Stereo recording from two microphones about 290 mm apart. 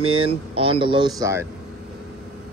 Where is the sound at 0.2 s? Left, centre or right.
Centre.